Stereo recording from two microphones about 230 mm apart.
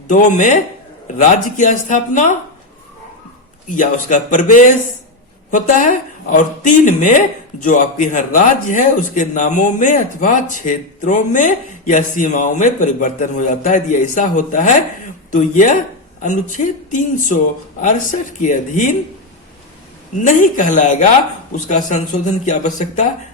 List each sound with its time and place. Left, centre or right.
0.1 s speech: left
3.7 s speech: left
20.1 s speech: left